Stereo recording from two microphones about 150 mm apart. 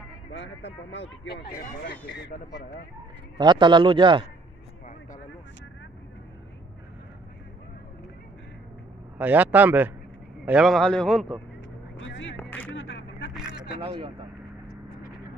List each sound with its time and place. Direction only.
1.6 s speech: 90° left
3.3 s a man's voice: 30° right (ahead or behind)
9.2 s a man's voice: 10° right (ahead or behind)
12.4 s music: 15° left (ahead or behind)
13.3 s vehicle: 5° right (ahead or behind)
13.7 s speech: 40° right (ahead or behind)